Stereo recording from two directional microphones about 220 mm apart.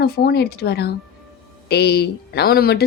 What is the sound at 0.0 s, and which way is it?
Speech, 45° left (ahead or behind).